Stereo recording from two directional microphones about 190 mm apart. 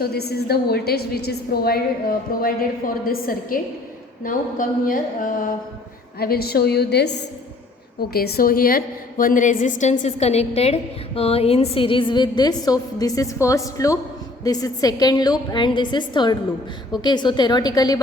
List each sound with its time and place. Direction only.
0.0 s a woman's voice: 55° left (ahead or behind); by 18.0 s 20° left (ahead or behind)